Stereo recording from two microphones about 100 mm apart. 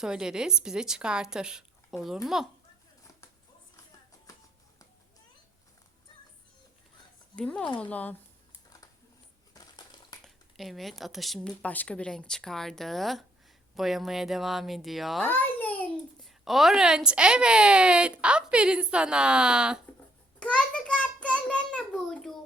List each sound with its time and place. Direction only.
0.0 s speech: 5° right (ahead or behind)
7.3 s speech: 10° left (ahead or behind)
9.6 s crushing: 45° left (ahead or behind)
10.2 s speech: centre (ahead or behind)
15.3 s babbling: 20° left (ahead or behind)
16.2 s speech: centre (ahead or behind)
20.4 s a sound: 15° left (ahead or behind)